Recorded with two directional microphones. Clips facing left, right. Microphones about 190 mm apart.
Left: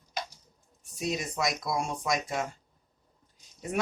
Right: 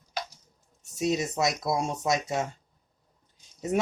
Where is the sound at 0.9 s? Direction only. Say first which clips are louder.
Right 5 dB; 25° right (ahead or behind).